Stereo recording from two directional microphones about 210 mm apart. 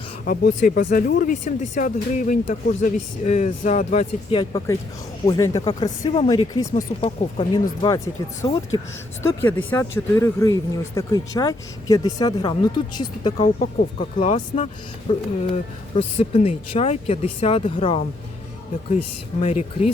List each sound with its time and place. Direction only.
0.3 s speech: 45° left (ahead or behind); by 13.3 s 20° left (ahead or behind)
13.4 s speech: 35° left (ahead or behind)
19.4 s speech: 30° left (ahead or behind)